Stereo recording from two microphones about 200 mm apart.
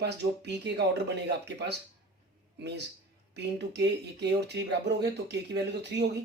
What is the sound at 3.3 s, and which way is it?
Speech, 55° right (ahead or behind).